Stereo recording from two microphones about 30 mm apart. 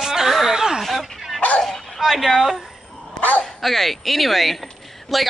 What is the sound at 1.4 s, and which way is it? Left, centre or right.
Bow-wow, left.